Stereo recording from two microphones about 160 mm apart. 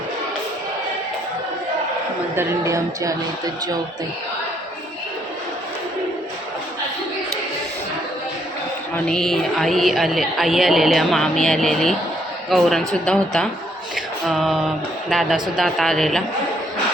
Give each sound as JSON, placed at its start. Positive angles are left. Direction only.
{"t": 2.3, "sound": "a woman's voice", "side_deg": -15}
{"t": 9.0, "sound": "speech", "side_deg": 5}
{"t": 13.9, "sound": "a sound", "side_deg": 0}
{"t": 15.1, "sound": "speech", "side_deg": 0}